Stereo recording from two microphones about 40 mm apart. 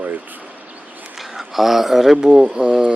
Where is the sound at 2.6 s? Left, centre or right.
Right.